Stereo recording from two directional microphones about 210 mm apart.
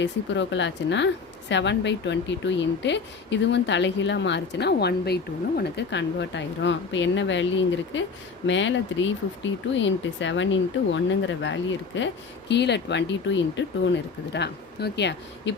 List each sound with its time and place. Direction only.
0.0 s a woman's voice: 60° left (ahead or behind)